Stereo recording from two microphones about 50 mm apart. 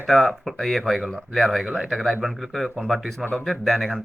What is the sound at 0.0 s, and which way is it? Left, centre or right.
A man's voice, centre.